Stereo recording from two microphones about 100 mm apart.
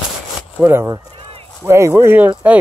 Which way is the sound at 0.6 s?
25° right (ahead or behind).